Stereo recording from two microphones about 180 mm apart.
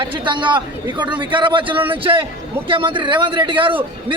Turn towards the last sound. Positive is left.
turn(degrees=-30)  # may be behind; listen again after turning